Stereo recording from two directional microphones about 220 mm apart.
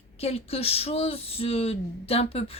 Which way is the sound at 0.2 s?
25° left (ahead or behind).